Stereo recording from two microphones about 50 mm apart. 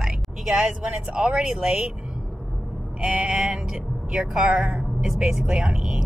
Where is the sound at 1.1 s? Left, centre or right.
Centre.